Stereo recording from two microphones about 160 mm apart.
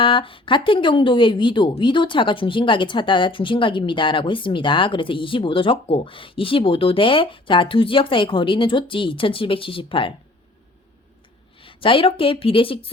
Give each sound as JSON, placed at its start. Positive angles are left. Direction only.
{"t": 0.0, "sound": "speech", "side_deg": 35}
{"t": 11.6, "sound": "speech", "side_deg": 35}